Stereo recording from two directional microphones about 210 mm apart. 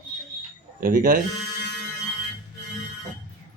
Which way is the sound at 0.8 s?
40° right (ahead or behind).